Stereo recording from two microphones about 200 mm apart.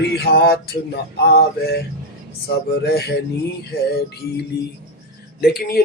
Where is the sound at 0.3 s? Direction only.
50° left (ahead or behind).